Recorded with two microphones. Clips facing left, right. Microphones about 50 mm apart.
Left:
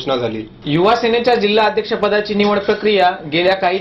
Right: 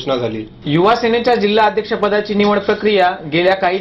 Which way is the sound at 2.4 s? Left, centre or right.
Centre.